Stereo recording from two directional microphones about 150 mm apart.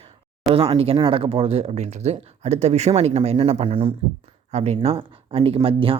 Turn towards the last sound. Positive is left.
turn(degrees=-40)  # may be behind; listen again after turning